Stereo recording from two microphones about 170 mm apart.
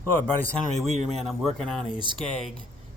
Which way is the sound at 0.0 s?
10° left (ahead or behind).